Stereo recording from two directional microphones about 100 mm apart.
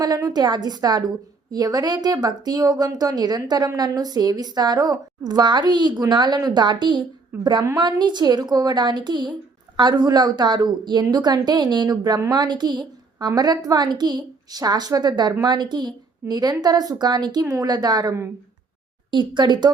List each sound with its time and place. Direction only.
0.0 s a woman's voice: 40° right (ahead or behind)
7.3 s a woman's voice: 20° right (ahead or behind)
7.8 s a woman's voice: 50° right (ahead or behind)
19.1 s a woman's voice: 55° right (ahead or behind)